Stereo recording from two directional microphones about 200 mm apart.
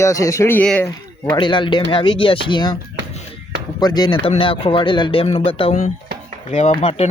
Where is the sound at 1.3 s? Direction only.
25° left (ahead or behind).